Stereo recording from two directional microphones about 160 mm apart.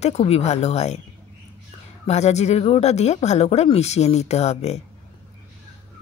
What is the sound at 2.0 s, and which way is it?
A woman's voice, 45° left (ahead or behind).